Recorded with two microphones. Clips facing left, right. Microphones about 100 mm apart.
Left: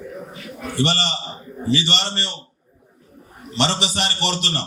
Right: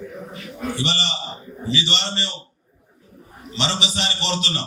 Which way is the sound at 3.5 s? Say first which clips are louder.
Left 3 dB; 55° left (ahead or behind).